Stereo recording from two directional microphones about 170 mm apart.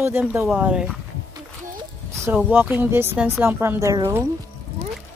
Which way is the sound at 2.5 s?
10° right (ahead or behind).